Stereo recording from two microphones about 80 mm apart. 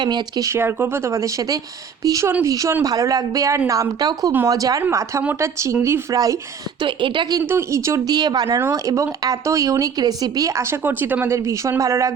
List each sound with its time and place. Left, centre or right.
0.0 s speech: right
0.4 s speech: right
6.8 s a woman's voice: right
7.4 s speech: right
8.0 s speech: right
8.4 s speech: right
8.7 s speech: right
10.6 s speech: right
11.3 s speech: right